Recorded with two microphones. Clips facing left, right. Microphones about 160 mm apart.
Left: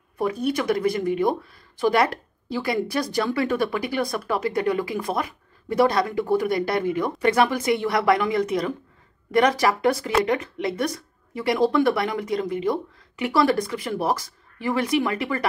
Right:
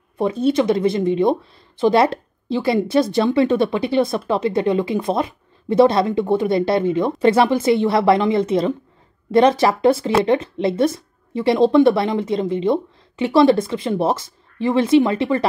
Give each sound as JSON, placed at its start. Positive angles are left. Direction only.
{"t": 0.2, "sound": "speech", "side_deg": -25}